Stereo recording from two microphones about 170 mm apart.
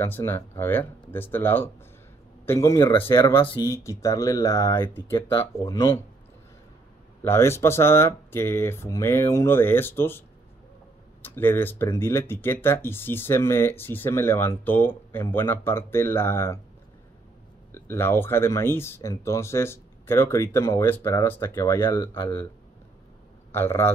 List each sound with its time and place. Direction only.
0.0 s speech: 15° left (ahead or behind)
7.2 s speech: 15° left (ahead or behind)
11.2 s speech: 10° left (ahead or behind)
17.7 s speech: 15° left (ahead or behind)
23.5 s speech: 15° left (ahead or behind)